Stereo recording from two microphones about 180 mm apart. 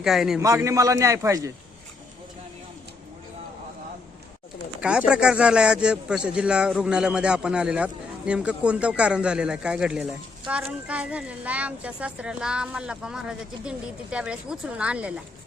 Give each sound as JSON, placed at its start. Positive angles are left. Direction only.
{"t": 0.0, "sound": "speech", "side_deg": 0}
{"t": 0.3, "sound": "a man's voice", "side_deg": -15}
{"t": 4.8, "sound": "speech", "side_deg": -5}